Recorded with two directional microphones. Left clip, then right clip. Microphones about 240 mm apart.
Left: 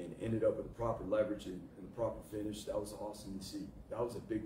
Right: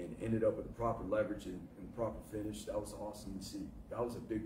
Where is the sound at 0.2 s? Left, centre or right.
Centre.